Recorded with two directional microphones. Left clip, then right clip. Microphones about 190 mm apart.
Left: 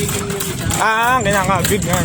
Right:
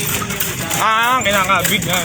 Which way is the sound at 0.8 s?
60° left (ahead or behind).